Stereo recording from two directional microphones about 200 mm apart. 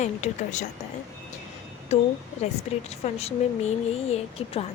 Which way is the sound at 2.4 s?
35° left (ahead or behind).